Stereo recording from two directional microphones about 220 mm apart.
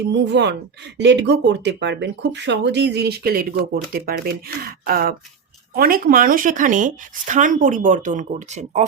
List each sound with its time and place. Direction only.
0.1 s speech: 50° right (ahead or behind); by 8.8 s 30° right (ahead or behind)